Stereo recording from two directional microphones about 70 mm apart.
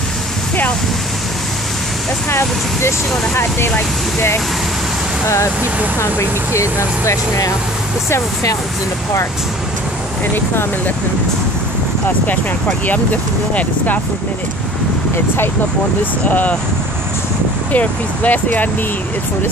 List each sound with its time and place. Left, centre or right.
3.3 s speech: left
5.9 s speech: left
10.3 s speech: left
16.3 s speech: left
17.7 s speech: left